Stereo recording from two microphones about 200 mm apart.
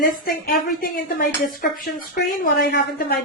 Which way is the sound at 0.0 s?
50° left (ahead or behind).